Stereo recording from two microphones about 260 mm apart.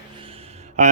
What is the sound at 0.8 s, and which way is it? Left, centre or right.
Mantra, right.